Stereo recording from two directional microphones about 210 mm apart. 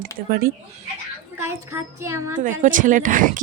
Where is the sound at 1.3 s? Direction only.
15° right (ahead or behind).